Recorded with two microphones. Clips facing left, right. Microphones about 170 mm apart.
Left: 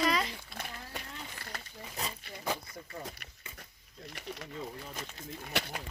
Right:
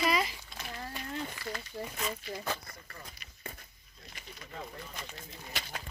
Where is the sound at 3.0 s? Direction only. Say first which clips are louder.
Left 2 dB; 65° left (ahead or behind).